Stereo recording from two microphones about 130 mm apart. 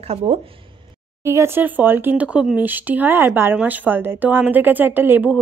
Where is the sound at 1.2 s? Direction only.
20° right (ahead or behind).